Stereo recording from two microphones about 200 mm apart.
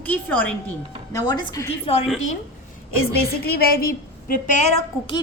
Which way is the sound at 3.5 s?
50° left (ahead or behind).